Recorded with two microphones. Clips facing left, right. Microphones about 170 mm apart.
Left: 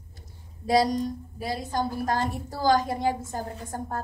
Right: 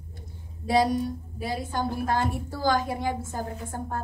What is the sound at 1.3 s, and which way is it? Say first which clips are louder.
A woman's voice: left 1 dB; 40° left (ahead or behind).